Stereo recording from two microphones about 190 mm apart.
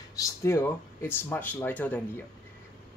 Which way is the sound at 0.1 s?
15° left (ahead or behind).